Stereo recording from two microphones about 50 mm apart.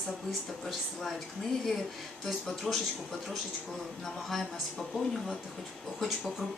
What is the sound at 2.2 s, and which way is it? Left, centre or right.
A man's voice, centre.